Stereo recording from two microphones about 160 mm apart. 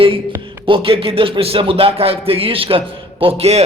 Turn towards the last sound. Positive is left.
turn(degrees=-40)  # may be behind; listen again after turning